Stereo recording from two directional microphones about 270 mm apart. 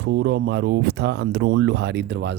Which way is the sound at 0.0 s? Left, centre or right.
Right.